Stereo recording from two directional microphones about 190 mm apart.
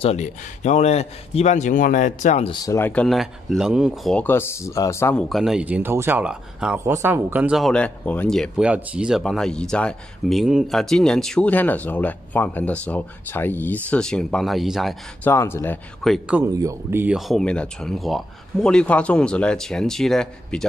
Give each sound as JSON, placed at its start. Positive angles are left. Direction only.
{"t": 0.0, "sound": "speech", "side_deg": 35}
{"t": 2.5, "sound": "speech", "side_deg": 15}
{"t": 5.3, "sound": "speech", "side_deg": 0}
{"t": 15.2, "sound": "speech", "side_deg": 10}
{"t": 16.5, "sound": "speech", "side_deg": -15}